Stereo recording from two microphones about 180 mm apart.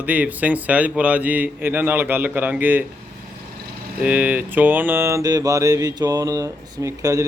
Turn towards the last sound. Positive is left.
turn(degrees=-15)  # may be behind; listen again after turning